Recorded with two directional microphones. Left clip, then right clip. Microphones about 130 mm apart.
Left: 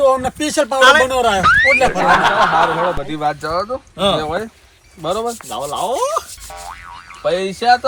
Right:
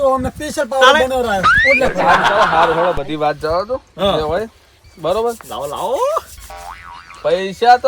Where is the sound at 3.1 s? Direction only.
35° right (ahead or behind).